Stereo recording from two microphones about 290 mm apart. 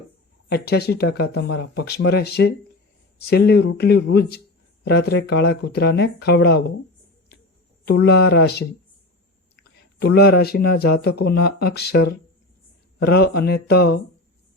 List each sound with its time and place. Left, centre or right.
0.5 s speech: left
7.9 s speech: left